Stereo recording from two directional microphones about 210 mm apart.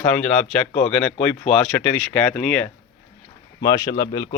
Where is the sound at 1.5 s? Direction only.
Centre (ahead or behind).